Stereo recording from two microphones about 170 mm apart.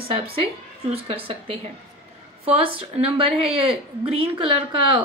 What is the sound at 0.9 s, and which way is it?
A woman's voice, 35° right (ahead or behind).